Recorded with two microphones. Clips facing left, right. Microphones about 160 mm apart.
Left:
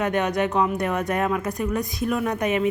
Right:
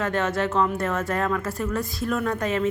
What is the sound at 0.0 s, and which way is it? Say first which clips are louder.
Speech: left 2 dB; 15° left (ahead or behind).